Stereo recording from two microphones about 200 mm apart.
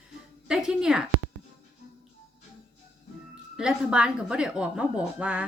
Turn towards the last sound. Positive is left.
turn(degrees=-5)  # may be behind; listen again after turning